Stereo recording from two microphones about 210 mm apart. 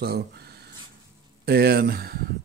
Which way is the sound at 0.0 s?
50° right (ahead or behind).